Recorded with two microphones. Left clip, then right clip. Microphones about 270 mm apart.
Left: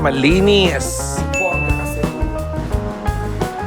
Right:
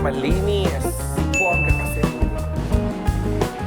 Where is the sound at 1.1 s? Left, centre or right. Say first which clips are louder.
Left 1 dB; centre.